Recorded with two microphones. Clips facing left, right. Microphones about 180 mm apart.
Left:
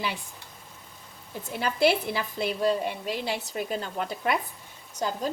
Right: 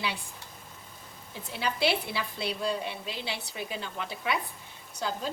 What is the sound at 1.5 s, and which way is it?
A woman's voice, 50° left (ahead or behind).